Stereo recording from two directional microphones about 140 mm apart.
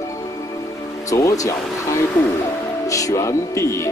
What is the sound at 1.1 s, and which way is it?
Speech, 20° left (ahead or behind).